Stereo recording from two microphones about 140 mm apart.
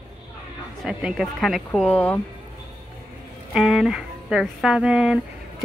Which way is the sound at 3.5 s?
Centre (ahead or behind).